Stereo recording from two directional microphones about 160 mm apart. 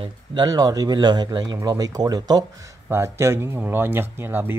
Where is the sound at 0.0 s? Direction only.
30° right (ahead or behind).